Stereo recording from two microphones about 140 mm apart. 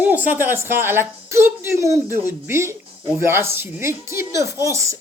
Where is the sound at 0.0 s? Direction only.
10° right (ahead or behind).